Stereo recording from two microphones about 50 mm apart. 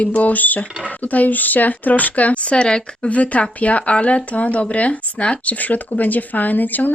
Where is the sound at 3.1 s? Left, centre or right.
Left.